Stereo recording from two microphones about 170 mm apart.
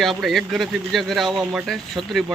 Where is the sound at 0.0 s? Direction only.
Centre (ahead or behind).